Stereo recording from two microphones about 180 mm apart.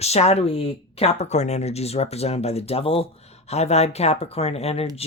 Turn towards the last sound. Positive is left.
turn(degrees=35)  # may be behind; listen again after turning